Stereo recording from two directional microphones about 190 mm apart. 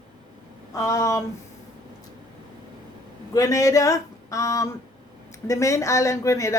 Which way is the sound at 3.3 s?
20° left (ahead or behind).